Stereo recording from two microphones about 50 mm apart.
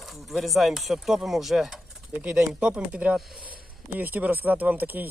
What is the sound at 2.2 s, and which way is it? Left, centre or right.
Speech, right.